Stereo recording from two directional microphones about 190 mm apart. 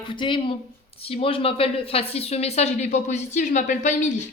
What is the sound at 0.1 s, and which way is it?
A woman's voice, 25° left (ahead or behind).